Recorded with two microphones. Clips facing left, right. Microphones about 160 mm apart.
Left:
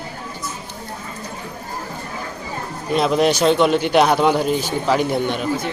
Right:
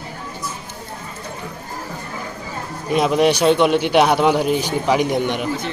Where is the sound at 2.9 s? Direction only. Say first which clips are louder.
Right 1 dB; 10° right (ahead or behind).